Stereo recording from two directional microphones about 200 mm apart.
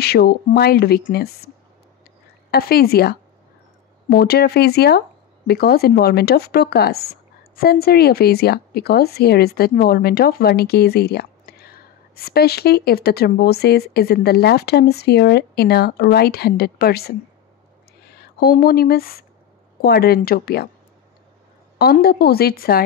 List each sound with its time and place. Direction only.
0.0 s speech: 55° left (ahead or behind)
2.5 s speech: 50° left (ahead or behind)
21.7 s speech: 50° left (ahead or behind)